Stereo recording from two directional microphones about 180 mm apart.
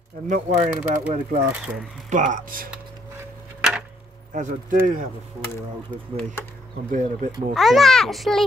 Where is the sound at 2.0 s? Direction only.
45° right (ahead or behind).